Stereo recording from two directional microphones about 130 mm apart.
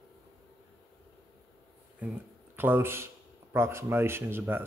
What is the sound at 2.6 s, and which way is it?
Speech, 15° right (ahead or behind).